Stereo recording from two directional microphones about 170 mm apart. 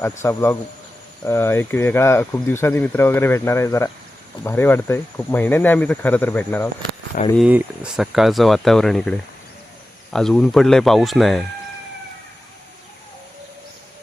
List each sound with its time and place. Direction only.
0.2 s speech: 15° left (ahead or behind)
7.3 s speech: 5° right (ahead or behind)